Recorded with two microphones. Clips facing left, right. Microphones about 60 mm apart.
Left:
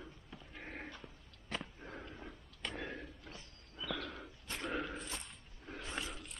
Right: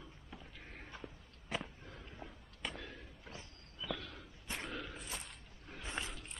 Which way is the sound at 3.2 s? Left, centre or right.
Centre.